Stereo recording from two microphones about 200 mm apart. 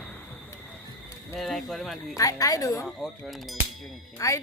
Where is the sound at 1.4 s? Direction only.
Centre (ahead or behind).